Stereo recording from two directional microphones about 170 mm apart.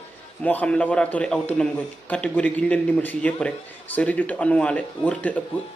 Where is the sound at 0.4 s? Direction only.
10° left (ahead or behind).